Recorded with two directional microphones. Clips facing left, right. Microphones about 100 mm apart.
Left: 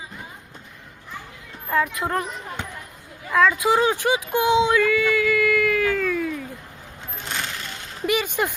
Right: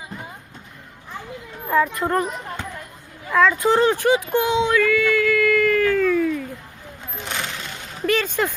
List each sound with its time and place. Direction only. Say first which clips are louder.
1.7 s speech: right 3 dB; centre (ahead or behind)
3.3 s a sound: right 2 dB; 5° left (ahead or behind)
8.0 s speech: right 2 dB; 15° left (ahead or behind)